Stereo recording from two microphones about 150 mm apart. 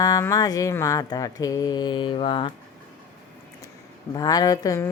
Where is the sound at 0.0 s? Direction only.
20° left (ahead or behind).